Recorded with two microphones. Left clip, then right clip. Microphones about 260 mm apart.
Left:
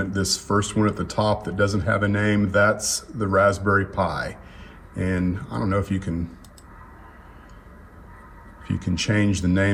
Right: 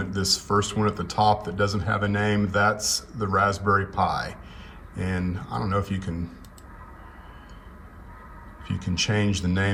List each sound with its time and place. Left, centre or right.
0.0 s speech: centre
8.8 s speech: centre